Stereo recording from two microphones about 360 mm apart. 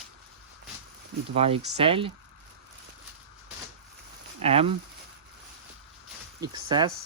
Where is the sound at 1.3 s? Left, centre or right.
Centre.